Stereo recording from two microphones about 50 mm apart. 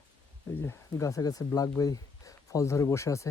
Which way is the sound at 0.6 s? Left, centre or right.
Left.